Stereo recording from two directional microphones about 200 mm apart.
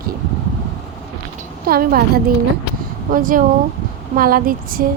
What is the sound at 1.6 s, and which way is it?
A woman's voice, 45° right (ahead or behind).